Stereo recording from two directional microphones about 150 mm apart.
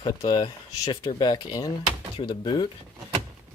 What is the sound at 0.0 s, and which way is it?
Speech, 25° left (ahead or behind).